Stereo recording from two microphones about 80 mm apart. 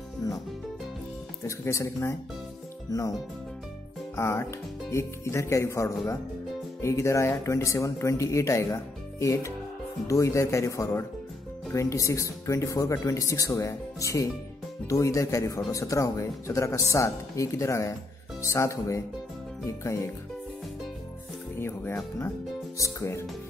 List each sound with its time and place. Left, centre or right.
0.2 s music: left
1.4 s speech: left
2.9 s speech: left
4.2 s speech: left
21.5 s speech: left